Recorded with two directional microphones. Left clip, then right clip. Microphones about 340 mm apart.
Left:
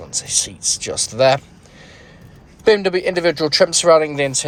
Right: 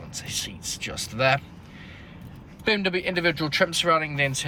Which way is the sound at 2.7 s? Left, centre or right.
Centre.